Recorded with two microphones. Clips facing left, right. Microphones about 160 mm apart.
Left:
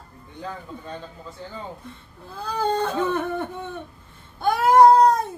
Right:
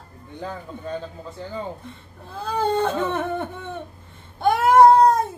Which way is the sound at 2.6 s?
25° right (ahead or behind).